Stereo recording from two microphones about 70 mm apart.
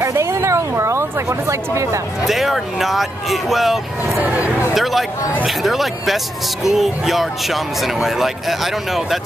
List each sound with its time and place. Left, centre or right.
0.0 s a sound: right
1.5 s speech: right
2.2 s speech: centre
5.4 s speech: centre